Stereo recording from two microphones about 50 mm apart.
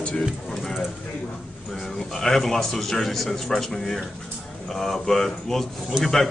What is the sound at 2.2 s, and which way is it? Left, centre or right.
A man's voice, centre.